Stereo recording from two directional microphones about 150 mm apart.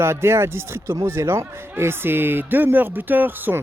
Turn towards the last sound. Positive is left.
turn(degrees=-10)  # may be behind; listen again after turning